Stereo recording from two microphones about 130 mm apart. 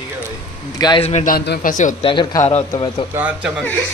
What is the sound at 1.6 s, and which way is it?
Speech, 90° left.